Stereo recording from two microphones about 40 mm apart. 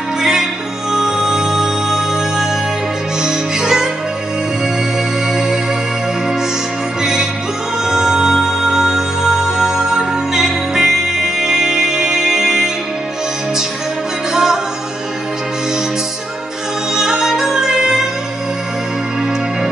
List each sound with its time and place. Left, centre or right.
0.2 s music: centre
7.0 s music: centre
14.3 s music: centre
16.9 s music: centre